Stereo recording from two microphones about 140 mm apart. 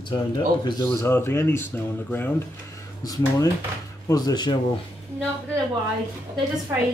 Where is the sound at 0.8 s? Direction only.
15° left (ahead or behind).